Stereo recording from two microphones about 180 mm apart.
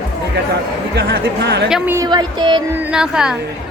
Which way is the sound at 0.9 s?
70° right (ahead or behind).